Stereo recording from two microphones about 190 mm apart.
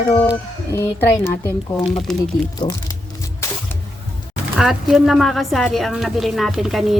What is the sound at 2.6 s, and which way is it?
Music, 20° left (ahead or behind).